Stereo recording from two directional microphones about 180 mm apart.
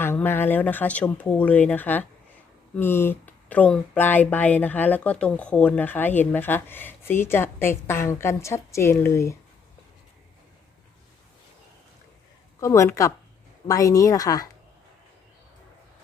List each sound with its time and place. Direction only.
0.0 s speech: 10° left (ahead or behind)
12.5 s a woman's voice: 15° left (ahead or behind)